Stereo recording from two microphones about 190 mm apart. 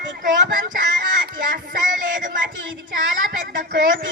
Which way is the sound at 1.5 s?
45° right (ahead or behind).